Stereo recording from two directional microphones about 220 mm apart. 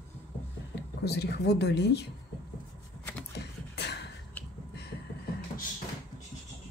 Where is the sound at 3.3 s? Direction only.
50° left (ahead or behind).